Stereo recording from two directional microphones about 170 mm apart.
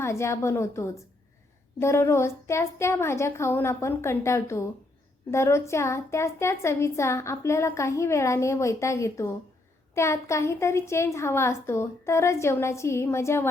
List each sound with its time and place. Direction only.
0.0 s a woman's voice: 15° left (ahead or behind)